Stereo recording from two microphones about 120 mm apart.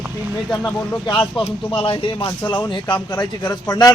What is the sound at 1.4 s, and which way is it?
A man's voice, 45° left (ahead or behind).